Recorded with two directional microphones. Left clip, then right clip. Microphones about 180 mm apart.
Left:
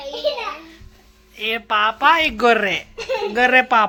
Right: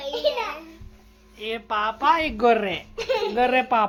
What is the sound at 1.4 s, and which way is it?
Speech, 10° left (ahead or behind).